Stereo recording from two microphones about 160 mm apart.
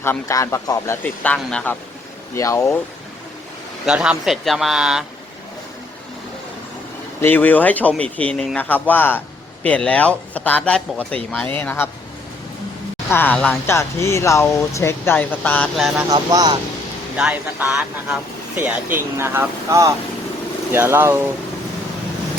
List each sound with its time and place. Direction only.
0.0 s speech: 15° left (ahead or behind)
2.3 s speech: 20° left (ahead or behind)
3.8 s speech: 5° right (ahead or behind)
7.2 s speech: 10° left (ahead or behind)
13.1 s speech: 10° left (ahead or behind)
16.0 s speech: 25° right (ahead or behind)
17.2 s speech: 5° right (ahead or behind)